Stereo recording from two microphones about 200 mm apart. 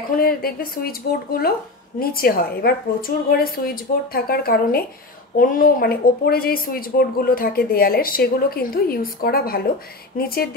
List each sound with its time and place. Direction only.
0.1 s a woman's voice: 50° left (ahead or behind)